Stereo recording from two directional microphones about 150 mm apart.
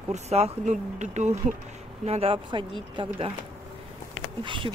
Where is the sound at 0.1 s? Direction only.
45° right (ahead or behind).